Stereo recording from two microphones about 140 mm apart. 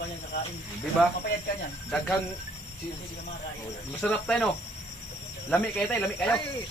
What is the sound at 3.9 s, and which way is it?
Speech, 10° left (ahead or behind).